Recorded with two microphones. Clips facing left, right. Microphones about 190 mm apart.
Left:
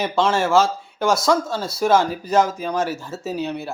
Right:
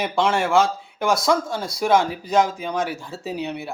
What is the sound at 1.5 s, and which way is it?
Speech, 15° right (ahead or behind).